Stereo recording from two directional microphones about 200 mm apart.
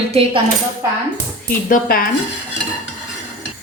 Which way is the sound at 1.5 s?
45° left (ahead or behind).